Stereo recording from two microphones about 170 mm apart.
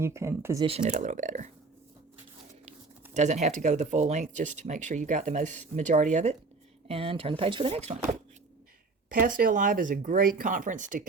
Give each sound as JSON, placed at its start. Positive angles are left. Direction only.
{"t": 0.0, "sound": "speech", "side_deg": -15}
{"t": 0.9, "sound": "speech", "side_deg": -45}
{"t": 3.2, "sound": "speech", "side_deg": -40}
{"t": 6.8, "sound": "speech", "side_deg": -35}
{"t": 9.0, "sound": "speech", "side_deg": -55}